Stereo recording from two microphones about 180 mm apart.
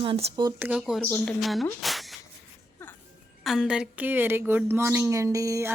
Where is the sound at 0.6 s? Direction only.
5° right (ahead or behind).